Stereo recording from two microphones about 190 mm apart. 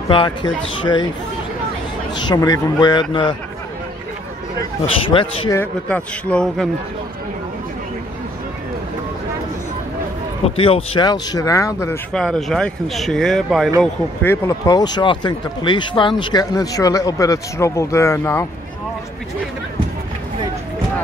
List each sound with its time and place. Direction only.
0.1 s speech: 25° left (ahead or behind)
2.1 s speech: 20° left (ahead or behind)
5.0 s speech: 25° left (ahead or behind)
5.6 s a man's voice: 10° left (ahead or behind)
10.4 s speech: 30° left (ahead or behind)
12.1 s speech: 5° left (ahead or behind)
14.2 s speech: 15° left (ahead or behind)